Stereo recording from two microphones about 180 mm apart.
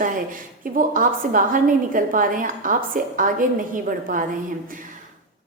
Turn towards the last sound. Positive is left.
turn(degrees=-45)  # may be behind; listen again after turning